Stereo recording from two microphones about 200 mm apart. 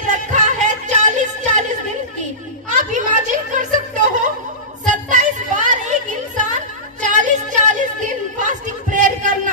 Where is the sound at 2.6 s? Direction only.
35° right (ahead or behind).